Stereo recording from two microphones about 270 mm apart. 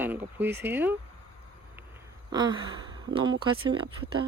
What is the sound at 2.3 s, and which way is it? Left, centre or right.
Gasp, centre.